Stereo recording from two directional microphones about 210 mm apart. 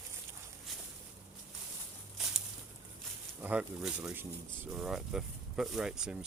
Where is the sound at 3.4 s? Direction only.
5° right (ahead or behind).